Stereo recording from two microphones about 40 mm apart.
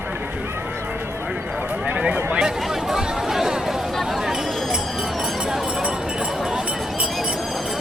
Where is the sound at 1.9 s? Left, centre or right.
Right.